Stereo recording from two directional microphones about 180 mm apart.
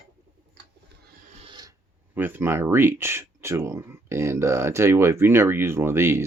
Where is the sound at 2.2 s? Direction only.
10° right (ahead or behind).